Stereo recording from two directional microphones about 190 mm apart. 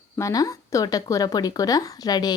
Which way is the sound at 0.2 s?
15° left (ahead or behind).